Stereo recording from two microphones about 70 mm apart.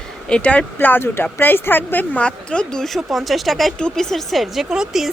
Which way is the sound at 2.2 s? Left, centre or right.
Centre.